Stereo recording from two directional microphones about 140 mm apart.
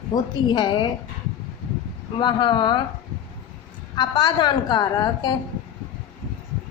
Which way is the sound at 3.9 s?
30° left (ahead or behind).